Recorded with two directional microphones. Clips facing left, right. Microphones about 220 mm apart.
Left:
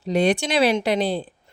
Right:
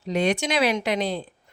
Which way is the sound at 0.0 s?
35° left (ahead or behind).